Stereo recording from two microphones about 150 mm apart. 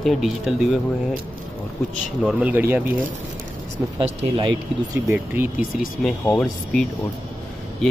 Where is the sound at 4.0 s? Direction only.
35° right (ahead or behind).